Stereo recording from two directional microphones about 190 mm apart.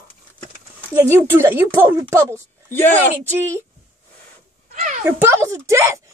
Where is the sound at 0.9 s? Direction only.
15° right (ahead or behind).